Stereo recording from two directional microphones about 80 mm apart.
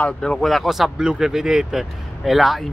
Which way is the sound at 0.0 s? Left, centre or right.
Centre.